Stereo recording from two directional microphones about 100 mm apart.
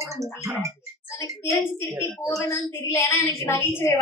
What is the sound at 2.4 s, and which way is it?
A woman's voice, 25° left (ahead or behind).